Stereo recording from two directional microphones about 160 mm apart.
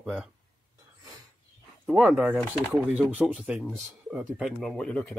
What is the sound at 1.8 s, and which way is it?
Speech, 5° right (ahead or behind).